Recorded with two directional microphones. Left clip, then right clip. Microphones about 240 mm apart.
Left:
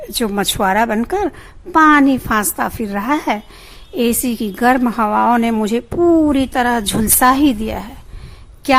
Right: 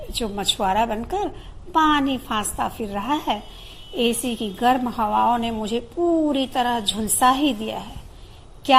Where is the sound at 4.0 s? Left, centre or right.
Left.